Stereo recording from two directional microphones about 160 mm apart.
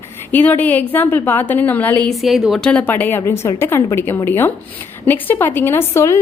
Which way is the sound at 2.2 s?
Centre (ahead or behind).